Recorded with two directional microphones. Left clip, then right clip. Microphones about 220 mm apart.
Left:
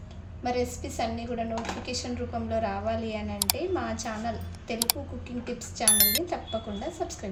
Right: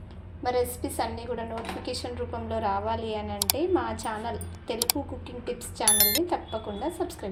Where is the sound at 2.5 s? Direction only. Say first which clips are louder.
Right 2 dB; 25° right (ahead or behind).